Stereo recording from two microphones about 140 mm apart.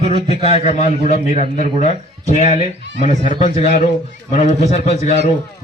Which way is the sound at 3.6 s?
90° left.